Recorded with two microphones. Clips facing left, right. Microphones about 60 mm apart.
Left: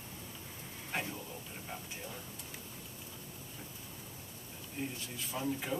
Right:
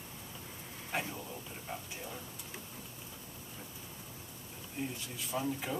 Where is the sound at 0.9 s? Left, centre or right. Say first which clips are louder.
Right 1 dB; centre.